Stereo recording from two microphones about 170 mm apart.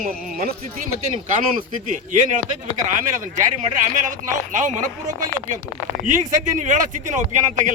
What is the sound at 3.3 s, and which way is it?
A man's voice, 45° right (ahead or behind).